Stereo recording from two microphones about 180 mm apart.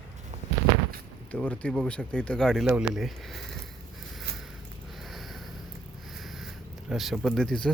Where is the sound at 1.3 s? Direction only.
5° left (ahead or behind).